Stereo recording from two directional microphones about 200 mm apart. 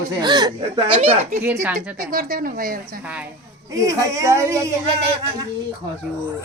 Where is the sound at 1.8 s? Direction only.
45° right (ahead or behind).